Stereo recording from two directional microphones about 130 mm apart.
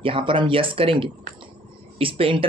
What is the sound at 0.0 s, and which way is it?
Speech, 40° right (ahead or behind).